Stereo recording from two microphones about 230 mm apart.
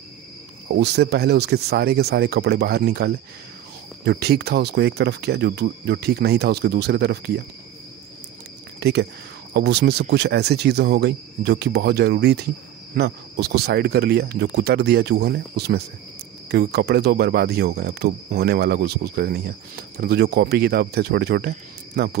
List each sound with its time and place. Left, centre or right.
0.7 s speech: right
8.7 s a sound: right
9.5 s speech: right